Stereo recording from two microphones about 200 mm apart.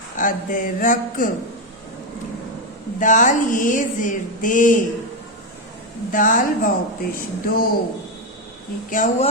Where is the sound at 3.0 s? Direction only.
40° left (ahead or behind).